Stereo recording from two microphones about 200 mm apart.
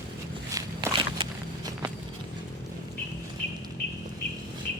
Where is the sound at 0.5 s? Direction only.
20° right (ahead or behind).